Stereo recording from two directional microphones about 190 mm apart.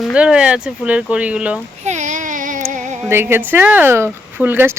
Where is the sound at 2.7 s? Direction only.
40° right (ahead or behind).